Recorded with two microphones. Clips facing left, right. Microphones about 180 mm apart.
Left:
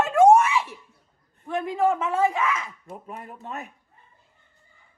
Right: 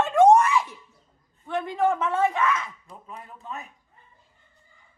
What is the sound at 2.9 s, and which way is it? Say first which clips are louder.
Speech: left 4 dB; 55° left (ahead or behind).